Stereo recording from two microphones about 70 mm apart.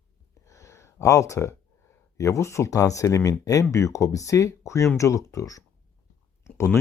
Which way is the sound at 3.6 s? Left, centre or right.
Left.